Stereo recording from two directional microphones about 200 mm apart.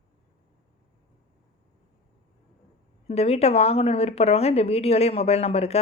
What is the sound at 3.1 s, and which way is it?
Speech, 30° left (ahead or behind).